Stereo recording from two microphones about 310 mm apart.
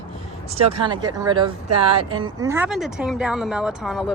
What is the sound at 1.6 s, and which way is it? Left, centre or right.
Speech, right.